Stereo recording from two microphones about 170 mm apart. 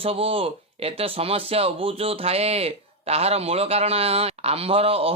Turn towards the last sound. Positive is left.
turn(degrees=-35)  # may be behind; listen again after turning